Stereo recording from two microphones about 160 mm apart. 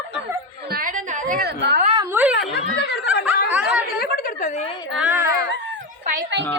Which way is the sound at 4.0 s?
65° left (ahead or behind).